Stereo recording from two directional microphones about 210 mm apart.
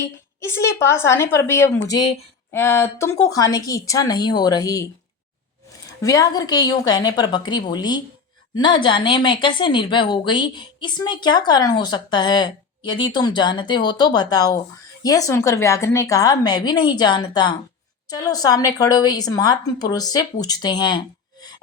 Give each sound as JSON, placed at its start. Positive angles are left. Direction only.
{"t": 0.3, "sound": "a woman's voice", "side_deg": 15}
{"t": 6.0, "sound": "a woman's voice", "side_deg": 15}